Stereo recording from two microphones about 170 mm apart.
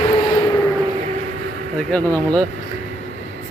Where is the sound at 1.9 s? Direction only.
10° left (ahead or behind).